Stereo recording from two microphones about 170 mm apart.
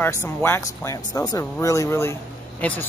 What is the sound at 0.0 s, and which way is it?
Speech, 15° left (ahead or behind).